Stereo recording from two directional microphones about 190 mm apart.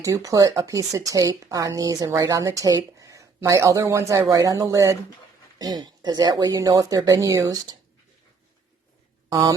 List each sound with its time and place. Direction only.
0.0 s speech: 15° right (ahead or behind)